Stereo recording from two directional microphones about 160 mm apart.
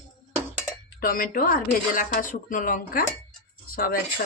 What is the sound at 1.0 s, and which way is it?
Speech, 65° left (ahead or behind).